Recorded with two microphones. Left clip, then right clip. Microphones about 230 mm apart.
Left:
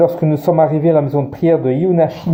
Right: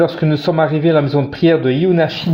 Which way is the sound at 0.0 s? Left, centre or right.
Right.